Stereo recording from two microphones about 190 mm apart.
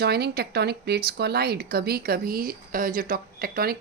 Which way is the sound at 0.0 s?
55° right (ahead or behind).